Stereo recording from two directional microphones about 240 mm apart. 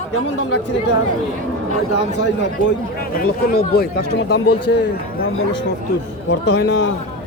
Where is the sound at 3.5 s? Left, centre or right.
Left.